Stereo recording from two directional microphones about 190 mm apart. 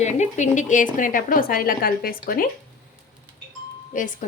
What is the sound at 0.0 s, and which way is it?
A woman's voice, 40° left (ahead or behind).